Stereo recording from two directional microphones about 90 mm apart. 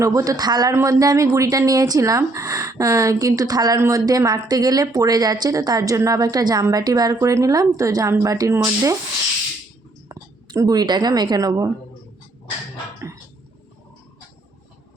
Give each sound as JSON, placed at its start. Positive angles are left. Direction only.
{"t": 0.0, "sound": "speech", "side_deg": -40}
{"t": 0.7, "sound": "a woman's voice", "side_deg": -35}
{"t": 10.1, "sound": "a woman's voice", "side_deg": -40}